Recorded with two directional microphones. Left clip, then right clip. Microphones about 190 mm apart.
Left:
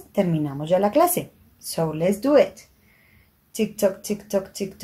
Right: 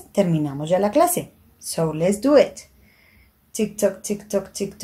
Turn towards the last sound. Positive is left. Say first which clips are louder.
# right 1 dB
turn(degrees=0)  # may be behind; listen again after turning